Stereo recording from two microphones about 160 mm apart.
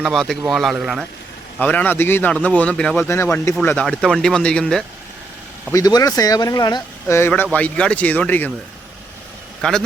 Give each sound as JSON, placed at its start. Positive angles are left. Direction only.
{"t": 0.0, "sound": "speech", "side_deg": 0}
{"t": 5.7, "sound": "speech", "side_deg": 20}
{"t": 7.2, "sound": "speech", "side_deg": 10}
{"t": 9.6, "sound": "speech", "side_deg": 5}